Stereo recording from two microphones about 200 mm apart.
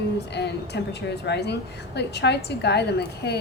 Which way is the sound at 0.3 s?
55° left (ahead or behind).